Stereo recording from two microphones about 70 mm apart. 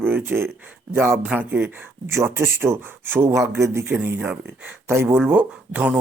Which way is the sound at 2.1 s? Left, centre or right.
Right.